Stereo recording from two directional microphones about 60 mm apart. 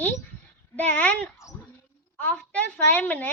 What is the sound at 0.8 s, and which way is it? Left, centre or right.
A woman's voice, left.